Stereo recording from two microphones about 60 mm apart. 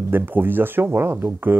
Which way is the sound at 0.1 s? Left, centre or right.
Right.